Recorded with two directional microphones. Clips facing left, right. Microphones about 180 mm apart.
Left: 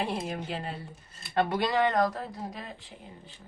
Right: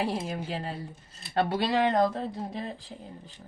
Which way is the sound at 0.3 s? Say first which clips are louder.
Right 1 dB; 35° right (ahead or behind).